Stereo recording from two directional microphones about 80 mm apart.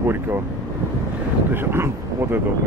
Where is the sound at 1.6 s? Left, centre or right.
Right.